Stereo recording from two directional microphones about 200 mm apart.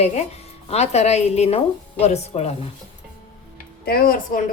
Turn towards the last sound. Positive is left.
turn(degrees=45)  # may be behind; listen again after turning